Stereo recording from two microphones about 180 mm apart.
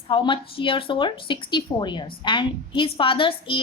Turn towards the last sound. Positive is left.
turn(degrees=30)  # may be behind; listen again after turning